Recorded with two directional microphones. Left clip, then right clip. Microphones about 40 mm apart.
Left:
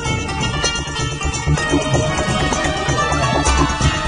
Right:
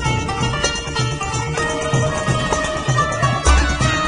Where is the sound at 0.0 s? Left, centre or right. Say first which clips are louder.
Right 1 dB; left.